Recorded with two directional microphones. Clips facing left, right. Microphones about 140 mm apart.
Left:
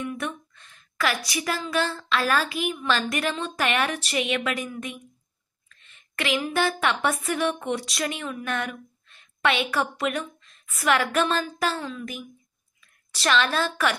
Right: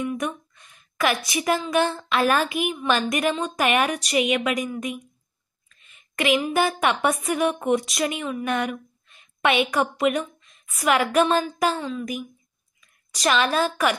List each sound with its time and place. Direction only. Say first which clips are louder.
0.0 s a sound: right 4 dB; 15° right (ahead or behind)
1.7 s a woman's voice: right 4 dB; 20° right (ahead or behind)
13.2 s a woman's voice: right 2 dB; 10° right (ahead or behind)